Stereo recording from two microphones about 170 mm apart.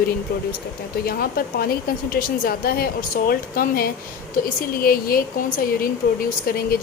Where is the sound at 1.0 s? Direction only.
65° left (ahead or behind).